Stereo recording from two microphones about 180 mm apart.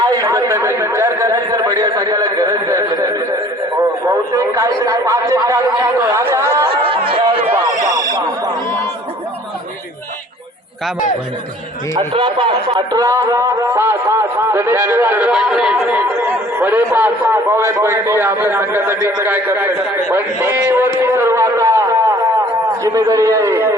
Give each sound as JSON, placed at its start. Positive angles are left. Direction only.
{"t": 0.0, "sound": "a sound", "side_deg": -20}
{"t": 3.8, "sound": "a man's voice", "side_deg": -20}
{"t": 6.7, "sound": "chatter", "side_deg": -30}
{"t": 11.9, "sound": "a man's voice", "side_deg": -30}